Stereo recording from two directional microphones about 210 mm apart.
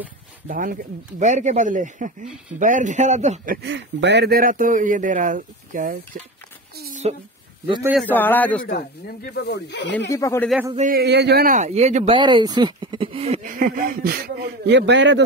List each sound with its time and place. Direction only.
0.5 s speech: 40° right (ahead or behind)
3.6 s speech: 55° right (ahead or behind); by 5.9 s 40° right (ahead or behind)
7.1 s speech: 30° right (ahead or behind)
8.0 s a man's voice: 10° left (ahead or behind)
8.6 s speech: 50° left (ahead or behind)
9.9 s a man's voice: 15° left (ahead or behind)
10.9 s speech: 50° right (ahead or behind); by 12.2 s 35° right (ahead or behind)
12.2 s speech: 20° right (ahead or behind); by 15.2 s 55° right (ahead or behind)